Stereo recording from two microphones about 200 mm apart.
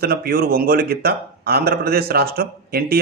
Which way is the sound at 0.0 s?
50° right (ahead or behind).